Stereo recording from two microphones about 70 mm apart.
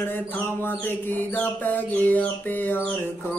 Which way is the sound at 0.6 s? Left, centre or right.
Left.